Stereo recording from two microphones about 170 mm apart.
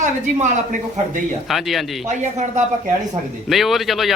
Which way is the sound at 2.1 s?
45° right (ahead or behind).